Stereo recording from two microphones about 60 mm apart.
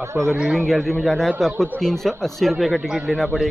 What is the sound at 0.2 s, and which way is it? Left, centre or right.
Speech, right.